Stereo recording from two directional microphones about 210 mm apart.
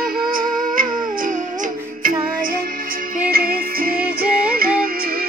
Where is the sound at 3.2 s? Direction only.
45° right (ahead or behind).